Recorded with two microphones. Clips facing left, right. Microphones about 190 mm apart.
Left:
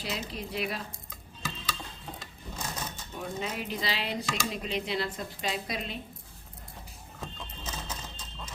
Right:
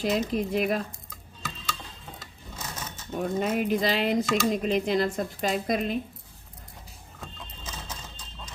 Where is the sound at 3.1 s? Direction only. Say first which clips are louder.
Right 10 dB; 50° right (ahead or behind).